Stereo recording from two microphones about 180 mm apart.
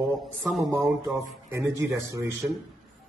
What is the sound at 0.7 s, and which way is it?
A man's voice, 15° right (ahead or behind).